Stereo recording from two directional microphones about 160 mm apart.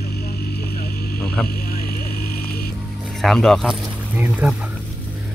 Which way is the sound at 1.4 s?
70° left (ahead or behind).